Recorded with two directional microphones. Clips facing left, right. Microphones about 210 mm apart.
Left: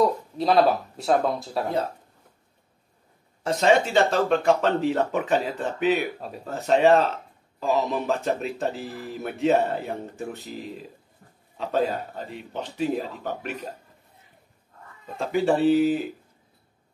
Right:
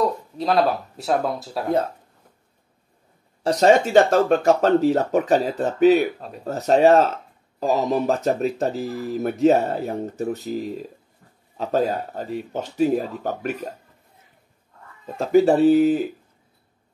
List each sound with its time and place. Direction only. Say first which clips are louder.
0.0 s speech: left 1 dB; centre (ahead or behind)
3.4 s speech: right 4 dB; 40° right (ahead or behind)
15.1 s speech: right 6 dB; 40° right (ahead or behind)